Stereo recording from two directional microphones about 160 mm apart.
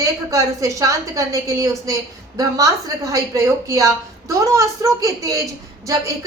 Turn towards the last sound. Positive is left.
turn(degrees=-20)  # may be behind; listen again after turning